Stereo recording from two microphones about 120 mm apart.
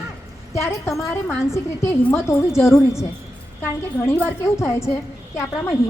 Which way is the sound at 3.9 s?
15° left (ahead or behind).